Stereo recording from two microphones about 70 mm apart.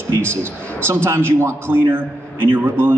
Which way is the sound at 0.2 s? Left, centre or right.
Right.